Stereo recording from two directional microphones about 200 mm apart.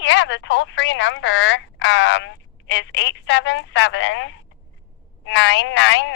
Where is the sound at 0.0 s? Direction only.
65° left (ahead or behind).